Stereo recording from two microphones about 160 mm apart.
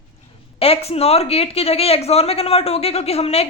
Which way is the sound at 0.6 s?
40° left (ahead or behind).